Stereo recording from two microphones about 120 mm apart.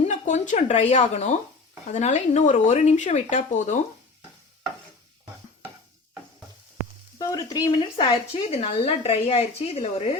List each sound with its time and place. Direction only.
0.0 s speech: 75° left (ahead or behind); by 3.8 s 90° left
7.2 s speech: 30° left (ahead or behind)
7.7 s a woman's voice: 50° left (ahead or behind)